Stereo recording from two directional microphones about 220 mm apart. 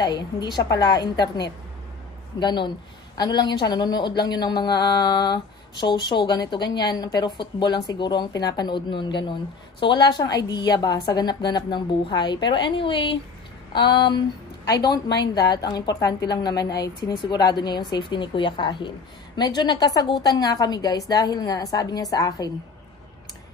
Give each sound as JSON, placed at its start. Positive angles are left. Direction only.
{"t": 0.0, "sound": "a woman's voice", "side_deg": 20}